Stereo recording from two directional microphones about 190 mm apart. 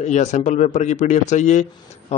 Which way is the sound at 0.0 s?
40° left (ahead or behind).